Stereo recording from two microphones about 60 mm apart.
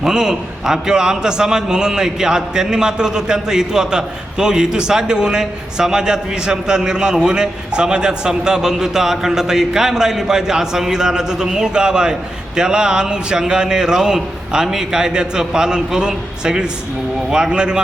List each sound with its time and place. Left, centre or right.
0.0 s a man's voice: centre